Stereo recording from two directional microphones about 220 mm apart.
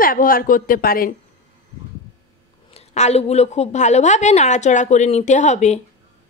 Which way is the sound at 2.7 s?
30° left (ahead or behind).